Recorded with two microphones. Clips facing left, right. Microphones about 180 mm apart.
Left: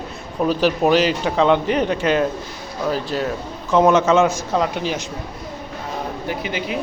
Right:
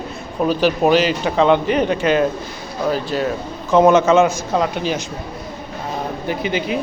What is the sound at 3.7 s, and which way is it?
Speech, 5° right (ahead or behind).